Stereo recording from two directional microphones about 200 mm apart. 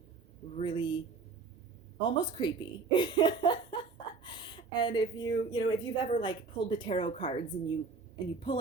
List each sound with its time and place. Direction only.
0.5 s a woman's voice: 25° left (ahead or behind)
2.0 s a woman's voice: 25° left (ahead or behind)